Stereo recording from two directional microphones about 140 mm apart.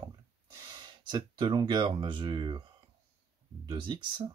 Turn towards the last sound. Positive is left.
turn(degrees=-35)  # may be behind; listen again after turning